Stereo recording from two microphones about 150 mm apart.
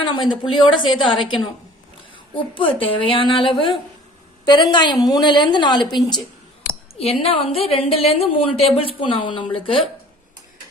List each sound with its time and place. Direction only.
0.0 s a woman's voice: 35° left (ahead or behind)
4.7 s a woman's voice: 30° left (ahead or behind)
7.0 s a woman's voice: 40° left (ahead or behind)